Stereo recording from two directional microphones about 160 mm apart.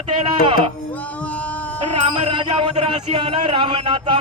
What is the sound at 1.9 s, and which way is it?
Music, 30° right (ahead or behind).